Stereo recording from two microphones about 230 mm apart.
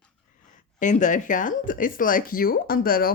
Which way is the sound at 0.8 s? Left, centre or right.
Left.